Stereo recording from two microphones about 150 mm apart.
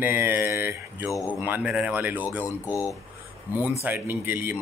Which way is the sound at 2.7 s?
20° left (ahead or behind).